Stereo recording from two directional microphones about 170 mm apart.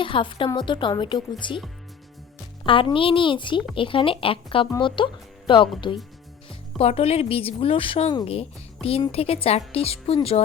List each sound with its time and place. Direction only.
0.0 s a woman's voice: 30° left (ahead or behind)
2.6 s a woman's voice: 30° left (ahead or behind)